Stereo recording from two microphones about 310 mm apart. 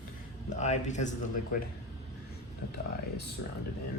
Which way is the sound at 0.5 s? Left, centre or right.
Left.